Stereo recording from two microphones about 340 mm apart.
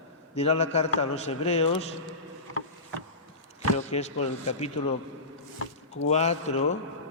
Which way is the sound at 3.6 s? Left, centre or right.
Centre.